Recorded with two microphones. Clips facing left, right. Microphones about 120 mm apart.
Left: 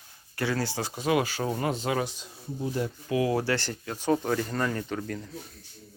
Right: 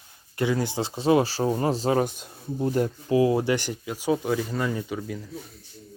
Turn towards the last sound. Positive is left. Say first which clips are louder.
# right 1 dB
turn(degrees=-5)  # may be behind; listen again after turning